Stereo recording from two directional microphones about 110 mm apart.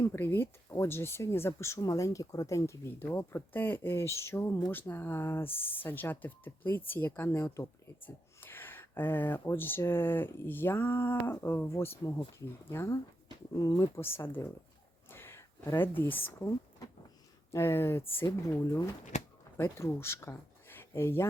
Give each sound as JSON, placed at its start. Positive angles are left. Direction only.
{"t": 0.0, "sound": "speech", "side_deg": 20}
{"t": 17.5, "sound": "speech", "side_deg": 25}
{"t": 19.1, "sound": "a sound", "side_deg": 90}
{"t": 19.5, "sound": "speech", "side_deg": 20}